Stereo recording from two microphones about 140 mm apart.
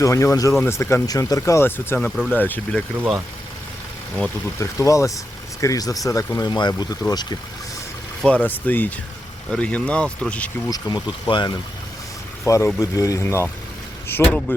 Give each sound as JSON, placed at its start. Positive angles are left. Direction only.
{"t": 0.0, "sound": "speech", "side_deg": 20}
{"t": 4.6, "sound": "speech", "side_deg": 20}
{"t": 8.2, "sound": "speech", "side_deg": 10}
{"t": 10.7, "sound": "speech", "side_deg": 30}
{"t": 12.5, "sound": "speech", "side_deg": 20}